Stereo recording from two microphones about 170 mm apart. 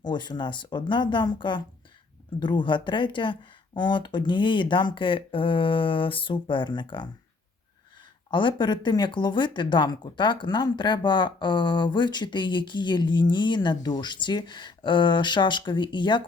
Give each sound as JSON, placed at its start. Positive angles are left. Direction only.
{"t": 0.0, "sound": "speech", "side_deg": 25}
{"t": 8.3, "sound": "speech", "side_deg": 30}